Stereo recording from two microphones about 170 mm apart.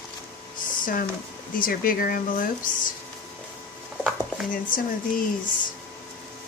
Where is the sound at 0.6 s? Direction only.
55° left (ahead or behind).